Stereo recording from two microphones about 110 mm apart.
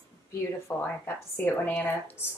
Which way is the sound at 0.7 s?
15° left (ahead or behind).